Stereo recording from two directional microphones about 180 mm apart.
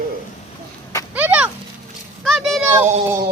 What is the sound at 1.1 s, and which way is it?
A child's voice, 10° right (ahead or behind).